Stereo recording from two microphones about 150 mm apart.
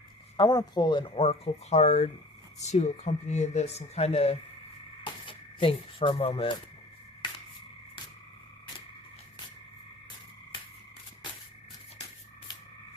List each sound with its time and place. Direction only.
0.3 s speech: 25° left (ahead or behind)